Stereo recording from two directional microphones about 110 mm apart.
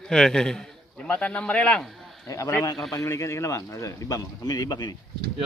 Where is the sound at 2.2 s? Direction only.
30° left (ahead or behind).